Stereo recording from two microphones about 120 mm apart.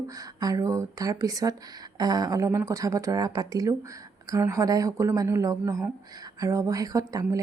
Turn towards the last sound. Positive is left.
turn(degrees=-30)  # may be behind; listen again after turning